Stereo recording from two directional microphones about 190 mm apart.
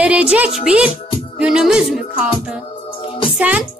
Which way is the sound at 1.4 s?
5° right (ahead or behind).